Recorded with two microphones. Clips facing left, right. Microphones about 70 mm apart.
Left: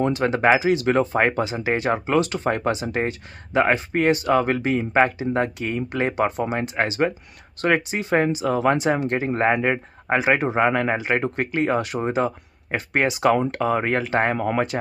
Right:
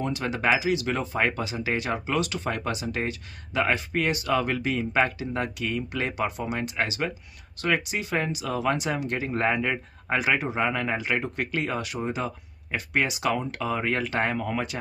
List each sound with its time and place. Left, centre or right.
0.0 s speech: left